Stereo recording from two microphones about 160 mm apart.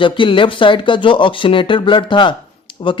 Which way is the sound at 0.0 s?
30° left (ahead or behind).